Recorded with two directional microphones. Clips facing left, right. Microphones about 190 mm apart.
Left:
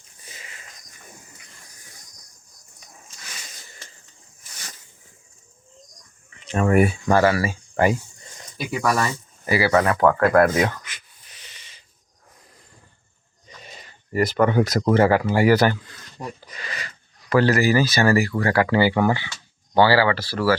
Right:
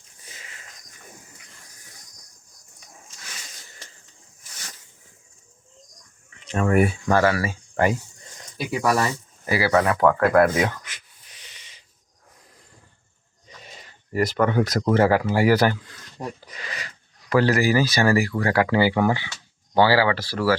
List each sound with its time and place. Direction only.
6.4 s speech: 5° left (ahead or behind)
8.7 s speech: 30° right (ahead or behind)
9.5 s speech: 5° left (ahead or behind)
11.3 s a sound: 15° right (ahead or behind)
13.6 s a sound: centre (ahead or behind)
14.3 s speech: 15° left (ahead or behind); by 15.9 s 10° right (ahead or behind)
16.1 s speech: 20° right (ahead or behind)